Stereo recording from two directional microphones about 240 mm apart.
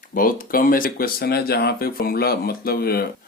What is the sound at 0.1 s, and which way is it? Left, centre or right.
Speech, left.